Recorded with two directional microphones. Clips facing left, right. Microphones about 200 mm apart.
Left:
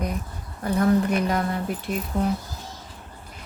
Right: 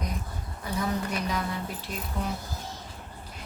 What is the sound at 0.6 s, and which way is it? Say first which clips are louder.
Speech: left 10 dB; 55° left (ahead or behind).